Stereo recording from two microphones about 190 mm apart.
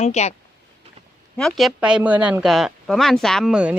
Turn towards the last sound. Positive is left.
turn(degrees=-5)  # may be behind; listen again after turning